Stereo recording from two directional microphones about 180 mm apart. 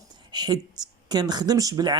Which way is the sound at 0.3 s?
20° right (ahead or behind).